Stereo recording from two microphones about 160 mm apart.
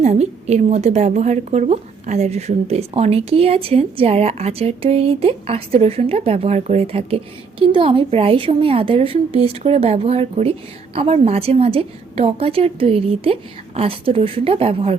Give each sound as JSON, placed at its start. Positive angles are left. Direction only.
{"t": 0.0, "sound": "a woman's voice", "side_deg": -45}